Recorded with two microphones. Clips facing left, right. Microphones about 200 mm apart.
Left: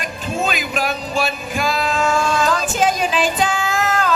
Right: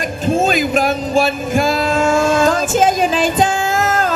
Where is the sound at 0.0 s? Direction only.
45° right (ahead or behind).